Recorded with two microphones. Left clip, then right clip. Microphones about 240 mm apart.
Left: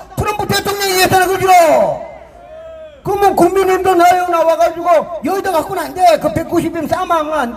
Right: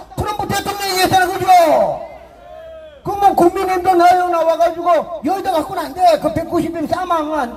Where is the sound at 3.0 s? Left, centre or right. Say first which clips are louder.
Left 1 dB; left.